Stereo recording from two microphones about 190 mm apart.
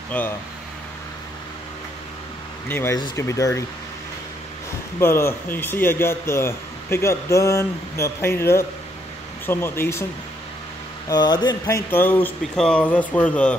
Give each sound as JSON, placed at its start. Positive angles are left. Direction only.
{"t": 0.1, "sound": "speech", "side_deg": 5}
{"t": 2.7, "sound": "speech", "side_deg": 15}
{"t": 5.0, "sound": "speech", "side_deg": 15}
{"t": 11.1, "sound": "speech", "side_deg": 20}